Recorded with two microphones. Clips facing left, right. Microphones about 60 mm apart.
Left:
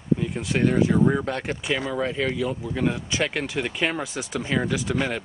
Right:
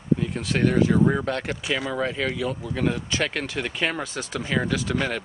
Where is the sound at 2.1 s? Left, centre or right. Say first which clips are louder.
Left 1 dB; left.